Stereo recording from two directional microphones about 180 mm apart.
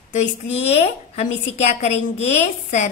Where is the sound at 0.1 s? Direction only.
40° left (ahead or behind).